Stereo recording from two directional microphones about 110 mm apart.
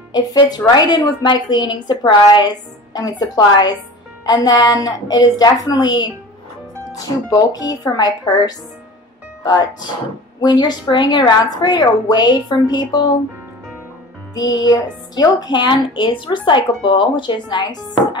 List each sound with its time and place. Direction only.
0.1 s a woman's voice: 40° left (ahead or behind)
14.3 s speech: 35° left (ahead or behind)